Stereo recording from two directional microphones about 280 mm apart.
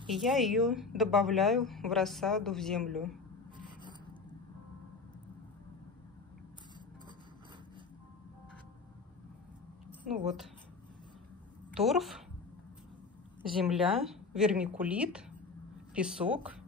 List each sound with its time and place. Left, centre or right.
0.1 s a woman's voice: centre
3.5 s a sound: centre
11.7 s a woman's voice: centre
13.6 s a woman's voice: centre